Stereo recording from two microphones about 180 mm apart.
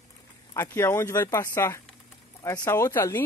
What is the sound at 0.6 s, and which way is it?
Speech, 15° left (ahead or behind).